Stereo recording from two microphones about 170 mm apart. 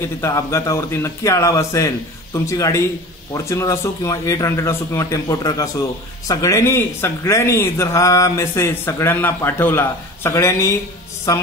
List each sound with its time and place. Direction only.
0.0 s speech: 15° left (ahead or behind)
11.3 s mantra: 20° left (ahead or behind)